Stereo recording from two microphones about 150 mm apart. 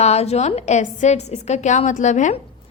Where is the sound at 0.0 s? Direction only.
45° left (ahead or behind).